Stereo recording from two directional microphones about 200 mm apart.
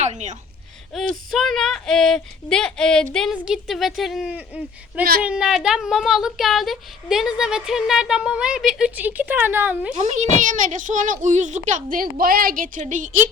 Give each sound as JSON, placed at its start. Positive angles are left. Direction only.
{"t": 0.0, "sound": "a child's voice", "side_deg": -35}
{"t": 0.9, "sound": "speech", "side_deg": 0}
{"t": 9.9, "sound": "a child's voice", "side_deg": -35}